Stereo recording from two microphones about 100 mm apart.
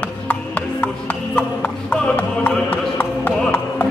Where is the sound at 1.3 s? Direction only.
15° left (ahead or behind).